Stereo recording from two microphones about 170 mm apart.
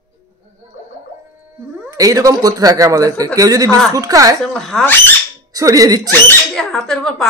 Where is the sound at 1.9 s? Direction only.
20° right (ahead or behind).